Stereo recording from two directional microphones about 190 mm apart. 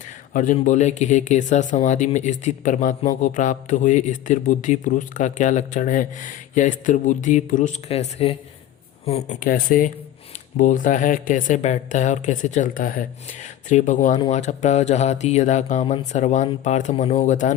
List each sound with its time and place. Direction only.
0.3 s speech: 40° left (ahead or behind)